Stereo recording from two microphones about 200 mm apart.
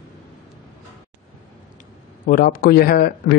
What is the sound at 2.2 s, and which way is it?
Speech, 45° left (ahead or behind).